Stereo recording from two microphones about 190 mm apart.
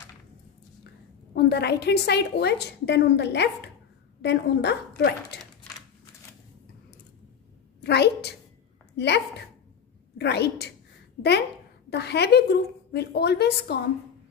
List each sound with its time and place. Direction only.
1.3 s a woman's voice: 60° left (ahead or behind)
5.4 s typewriter: centre (ahead or behind)
7.8 s a woman's voice: 60° left (ahead or behind)
11.2 s a woman's voice: 40° left (ahead or behind)
11.9 s a woman's voice: 60° left (ahead or behind)